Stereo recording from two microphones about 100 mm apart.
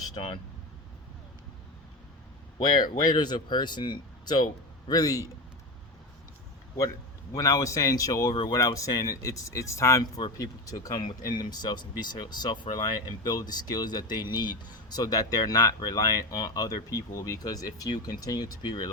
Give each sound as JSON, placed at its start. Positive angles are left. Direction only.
{"t": 2.6, "sound": "speech", "side_deg": 45}
{"t": 4.9, "sound": "speech", "side_deg": 40}
{"t": 7.3, "sound": "speech", "side_deg": 35}
{"t": 10.0, "sound": "speech", "side_deg": 45}